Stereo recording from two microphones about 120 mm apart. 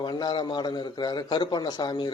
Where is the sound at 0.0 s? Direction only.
40° left (ahead or behind).